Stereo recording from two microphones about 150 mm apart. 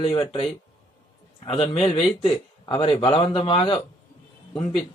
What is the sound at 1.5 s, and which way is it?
Speech, 40° left (ahead or behind).